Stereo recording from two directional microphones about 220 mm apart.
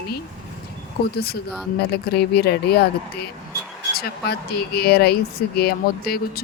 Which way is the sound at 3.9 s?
45° left (ahead or behind).